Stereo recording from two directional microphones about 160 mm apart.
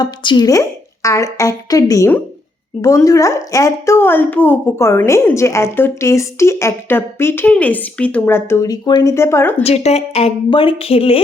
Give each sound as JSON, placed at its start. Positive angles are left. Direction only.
{"t": 0.0, "sound": "a woman's voice", "side_deg": 30}
{"t": 9.6, "sound": "a woman's voice", "side_deg": 40}